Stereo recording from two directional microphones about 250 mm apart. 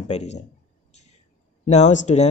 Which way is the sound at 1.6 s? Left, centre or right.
Left.